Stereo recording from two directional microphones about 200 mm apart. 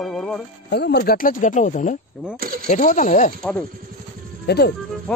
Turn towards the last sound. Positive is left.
turn(degrees=5)  # may be behind; listen again after turning